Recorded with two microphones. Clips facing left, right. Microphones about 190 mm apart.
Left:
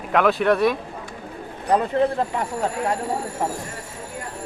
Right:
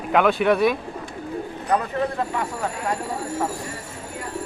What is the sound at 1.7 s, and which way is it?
Speech, 30° left (ahead or behind).